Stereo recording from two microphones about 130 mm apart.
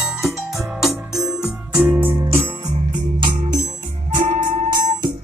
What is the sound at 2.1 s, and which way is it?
Music, 50° right (ahead or behind).